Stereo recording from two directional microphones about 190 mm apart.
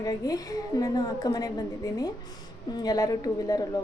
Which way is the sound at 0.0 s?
20° left (ahead or behind).